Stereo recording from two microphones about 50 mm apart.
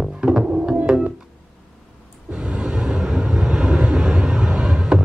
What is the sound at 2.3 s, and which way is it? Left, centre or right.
Vehicle, centre.